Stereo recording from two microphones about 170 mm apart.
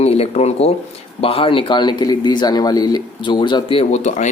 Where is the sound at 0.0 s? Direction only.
35° left (ahead or behind).